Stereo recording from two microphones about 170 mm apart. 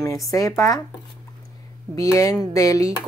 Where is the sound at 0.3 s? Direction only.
20° left (ahead or behind).